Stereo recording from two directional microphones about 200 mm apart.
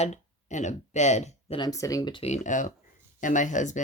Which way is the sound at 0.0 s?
35° left (ahead or behind).